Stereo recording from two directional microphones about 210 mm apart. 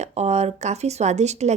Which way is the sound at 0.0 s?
30° right (ahead or behind).